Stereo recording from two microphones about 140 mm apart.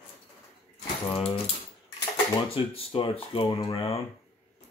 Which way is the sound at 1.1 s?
40° left (ahead or behind).